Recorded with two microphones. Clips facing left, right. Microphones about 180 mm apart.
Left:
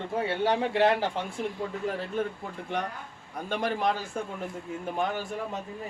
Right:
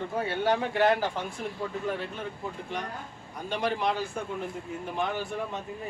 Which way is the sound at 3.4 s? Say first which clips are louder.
Even; 50° left (ahead or behind).